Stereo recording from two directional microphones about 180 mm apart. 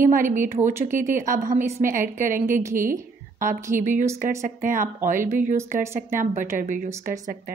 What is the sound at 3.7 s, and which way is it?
A woman's voice, 45° right (ahead or behind).